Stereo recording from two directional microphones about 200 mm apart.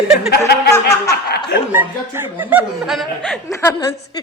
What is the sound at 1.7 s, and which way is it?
Speech, 10° right (ahead or behind).